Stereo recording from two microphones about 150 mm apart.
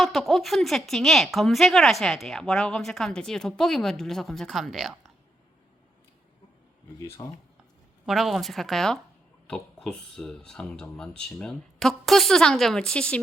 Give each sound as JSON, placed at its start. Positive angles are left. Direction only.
{"t": 0.0, "sound": "speech", "side_deg": 0}
{"t": 7.2, "sound": "speech", "side_deg": 25}
{"t": 8.0, "sound": "speech", "side_deg": 0}